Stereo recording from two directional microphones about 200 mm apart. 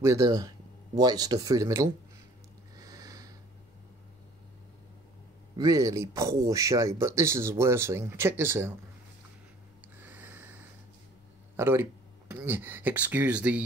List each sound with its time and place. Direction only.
0.0 s speech: 15° right (ahead or behind)
2.8 s a sound: 15° right (ahead or behind)
5.6 s speech: 15° right (ahead or behind)
9.9 s snort: 10° right (ahead or behind)
11.5 s speech: 10° right (ahead or behind)